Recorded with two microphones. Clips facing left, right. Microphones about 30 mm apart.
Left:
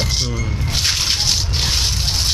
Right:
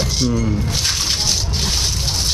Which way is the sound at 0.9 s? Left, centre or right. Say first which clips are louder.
Left 3 dB; centre.